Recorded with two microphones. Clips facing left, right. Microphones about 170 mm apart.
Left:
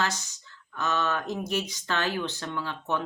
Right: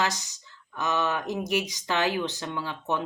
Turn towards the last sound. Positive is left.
turn(degrees=-15)  # may be behind; listen again after turning